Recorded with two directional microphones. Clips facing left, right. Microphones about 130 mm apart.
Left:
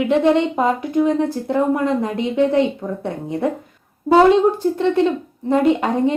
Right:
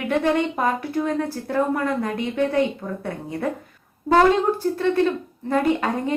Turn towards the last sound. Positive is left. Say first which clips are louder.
# left 5 dB
turn(degrees=20)  # may be behind; listen again after turning